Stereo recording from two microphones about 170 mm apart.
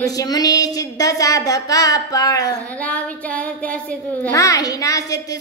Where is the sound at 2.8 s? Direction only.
10° left (ahead or behind).